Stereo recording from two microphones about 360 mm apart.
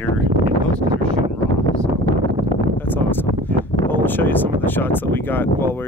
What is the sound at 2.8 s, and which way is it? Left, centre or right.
Speech, centre.